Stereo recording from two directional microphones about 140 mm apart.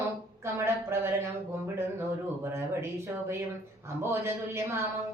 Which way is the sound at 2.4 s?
20° right (ahead or behind).